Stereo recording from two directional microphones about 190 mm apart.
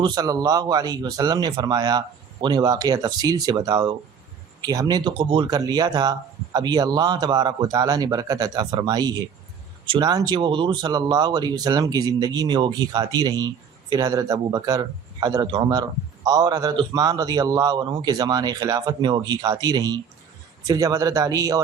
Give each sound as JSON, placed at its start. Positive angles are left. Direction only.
{"t": 0.0, "sound": "a man's voice", "side_deg": -20}